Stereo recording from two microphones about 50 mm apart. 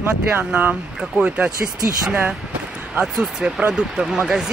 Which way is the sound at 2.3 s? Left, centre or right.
Right.